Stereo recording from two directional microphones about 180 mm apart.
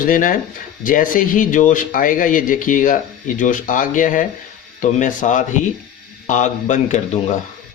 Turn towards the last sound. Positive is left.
turn(degrees=40)  # may be behind; listen again after turning